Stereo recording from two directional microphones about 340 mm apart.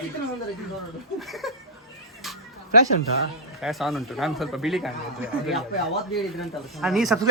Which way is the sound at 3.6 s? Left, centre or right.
Centre.